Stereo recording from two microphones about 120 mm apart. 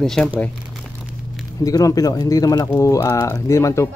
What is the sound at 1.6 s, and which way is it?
Speech, 30° left (ahead or behind).